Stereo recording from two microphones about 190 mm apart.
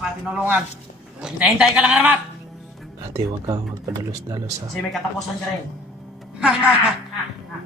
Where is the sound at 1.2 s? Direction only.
5° right (ahead or behind).